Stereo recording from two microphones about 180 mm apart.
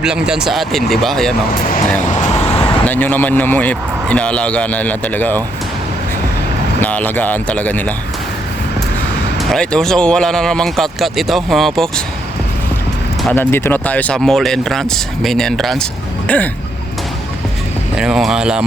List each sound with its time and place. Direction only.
0.0 s speech: 5° right (ahead or behind)
1.5 s speech: 50° left (ahead or behind)
2.8 s a man's voice: 10° left (ahead or behind)
6.8 s a man's voice: 10° left (ahead or behind)
9.4 s speech: 5° left (ahead or behind)
13.3 s speech: 10° left (ahead or behind)
17.9 s speech: 5° right (ahead or behind)